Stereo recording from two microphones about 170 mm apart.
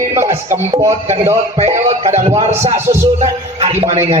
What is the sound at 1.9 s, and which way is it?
Speech, 40° right (ahead or behind).